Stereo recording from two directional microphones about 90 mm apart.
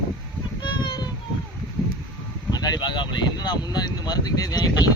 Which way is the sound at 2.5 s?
50° left (ahead or behind).